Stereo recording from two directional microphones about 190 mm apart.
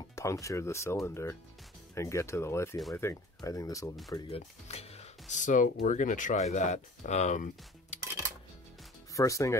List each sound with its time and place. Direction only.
0.1 s speech: 15° left (ahead or behind)
4.3 s speech: 35° left (ahead or behind)
9.1 s speech: 15° left (ahead or behind)